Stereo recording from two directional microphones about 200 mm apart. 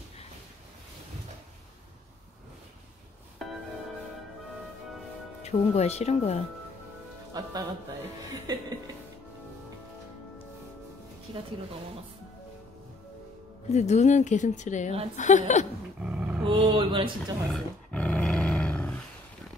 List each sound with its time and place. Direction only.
5.4 s a woman's voice: 30° left (ahead or behind)
7.3 s speech: 20° right (ahead or behind)
13.7 s a woman's voice: 35° left (ahead or behind)
16.0 s dog: 5° right (ahead or behind)
16.4 s speech: 25° right (ahead or behind)
17.5 s roar: 5° left (ahead or behind)